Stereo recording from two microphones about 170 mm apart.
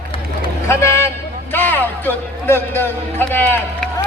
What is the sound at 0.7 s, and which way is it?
A man's voice, 15° left (ahead or behind).